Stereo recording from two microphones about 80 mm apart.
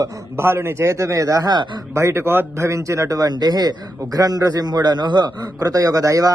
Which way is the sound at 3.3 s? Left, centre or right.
Right.